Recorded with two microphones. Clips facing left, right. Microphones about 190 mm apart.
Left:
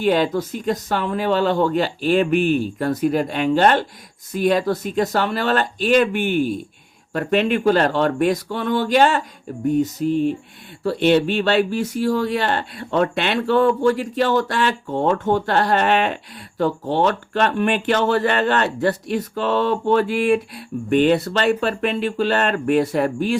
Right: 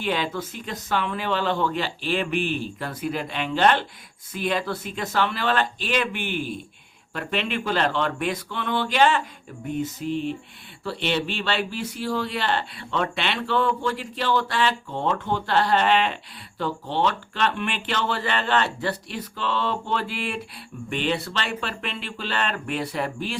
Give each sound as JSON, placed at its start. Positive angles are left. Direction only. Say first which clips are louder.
{"t": 0.0, "sound": "speech", "louder": "left 8 dB", "side_deg": 45}